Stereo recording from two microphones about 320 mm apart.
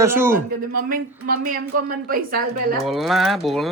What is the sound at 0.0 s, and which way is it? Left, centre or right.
Speech, centre.